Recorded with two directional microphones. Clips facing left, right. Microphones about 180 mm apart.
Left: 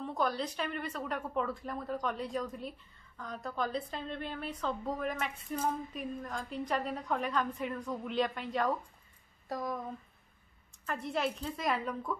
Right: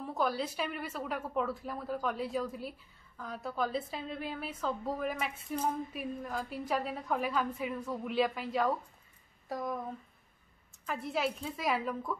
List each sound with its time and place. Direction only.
0.0 s a woman's voice: 5° right (ahead or behind)
10.9 s a woman's voice: centre (ahead or behind)